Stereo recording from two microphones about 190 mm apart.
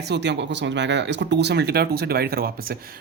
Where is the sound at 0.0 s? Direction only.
65° right (ahead or behind).